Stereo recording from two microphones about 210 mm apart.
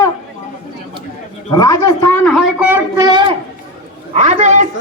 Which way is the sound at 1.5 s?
20° left (ahead or behind).